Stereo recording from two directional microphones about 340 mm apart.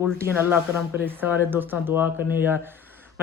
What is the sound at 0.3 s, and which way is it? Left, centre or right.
A man's voice, centre.